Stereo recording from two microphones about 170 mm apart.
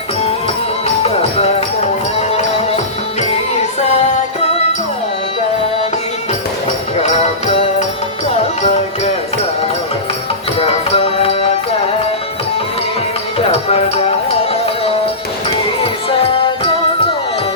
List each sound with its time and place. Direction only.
1.0 s music: 40° left (ahead or behind)
6.9 s music: 40° left (ahead or behind)
10.6 s music: 35° left (ahead or behind)
13.5 s music: 35° left (ahead or behind)